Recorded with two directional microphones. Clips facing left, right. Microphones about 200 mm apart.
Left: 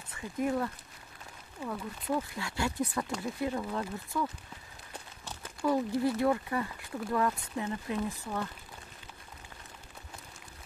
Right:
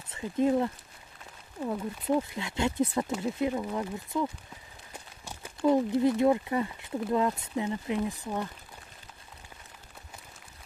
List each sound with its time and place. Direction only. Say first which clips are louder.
0.1 s speech: right 6 dB; 25° right (ahead or behind)
1.7 s speech: right 5 dB; 20° right (ahead or behind)